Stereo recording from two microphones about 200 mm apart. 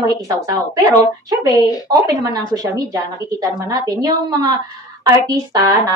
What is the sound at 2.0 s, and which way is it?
A woman's voice, 20° right (ahead or behind).